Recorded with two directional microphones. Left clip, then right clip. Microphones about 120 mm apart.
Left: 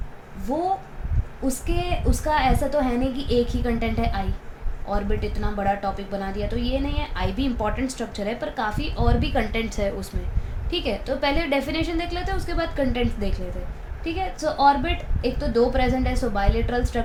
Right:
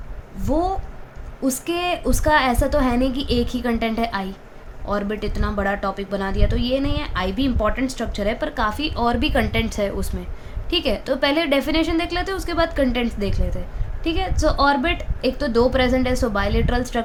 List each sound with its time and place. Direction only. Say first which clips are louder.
0.5 s a woman's voice: right 2 dB; 60° right (ahead or behind)